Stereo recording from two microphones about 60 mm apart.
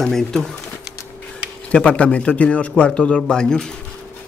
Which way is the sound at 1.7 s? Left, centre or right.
Left.